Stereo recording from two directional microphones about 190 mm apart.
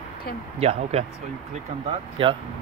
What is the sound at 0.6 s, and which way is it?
Speech, 35° right (ahead or behind).